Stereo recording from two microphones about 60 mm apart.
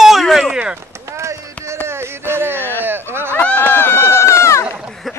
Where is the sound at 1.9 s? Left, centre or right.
Right.